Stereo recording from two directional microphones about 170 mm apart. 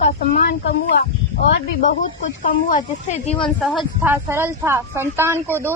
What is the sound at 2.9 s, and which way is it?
Speech, 40° left (ahead or behind).